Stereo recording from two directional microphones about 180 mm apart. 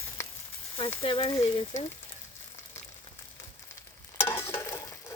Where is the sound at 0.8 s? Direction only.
30° left (ahead or behind).